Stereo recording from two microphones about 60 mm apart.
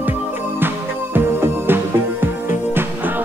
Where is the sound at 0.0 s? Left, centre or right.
Right.